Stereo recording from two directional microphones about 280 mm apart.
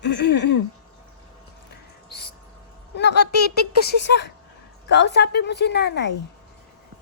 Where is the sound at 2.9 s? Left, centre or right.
Left.